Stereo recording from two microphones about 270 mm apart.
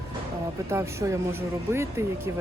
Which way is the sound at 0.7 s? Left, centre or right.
Centre.